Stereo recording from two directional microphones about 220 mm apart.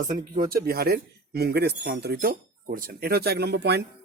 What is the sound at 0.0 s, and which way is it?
A man's voice, 40° right (ahead or behind).